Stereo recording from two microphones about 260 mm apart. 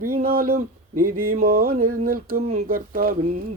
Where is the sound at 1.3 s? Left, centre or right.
Right.